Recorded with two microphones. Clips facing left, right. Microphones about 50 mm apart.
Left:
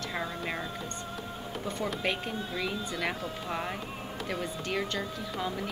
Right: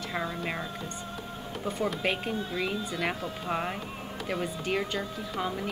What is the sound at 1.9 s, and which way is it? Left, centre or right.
Speech, centre.